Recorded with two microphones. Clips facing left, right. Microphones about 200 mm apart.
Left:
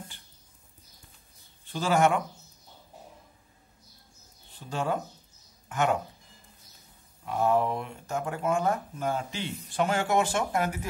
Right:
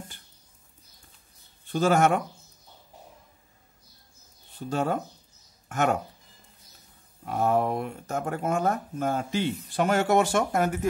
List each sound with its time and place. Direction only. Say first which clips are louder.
1.7 s speech: right 3 dB; 50° right (ahead or behind)
4.6 s speech: right 3 dB; 40° right (ahead or behind)
7.2 s speech: right 1 dB; 45° right (ahead or behind)